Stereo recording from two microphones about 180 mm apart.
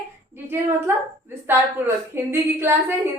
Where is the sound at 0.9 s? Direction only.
10° right (ahead or behind).